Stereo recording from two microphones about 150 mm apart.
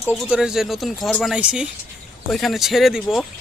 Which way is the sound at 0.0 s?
5° right (ahead or behind).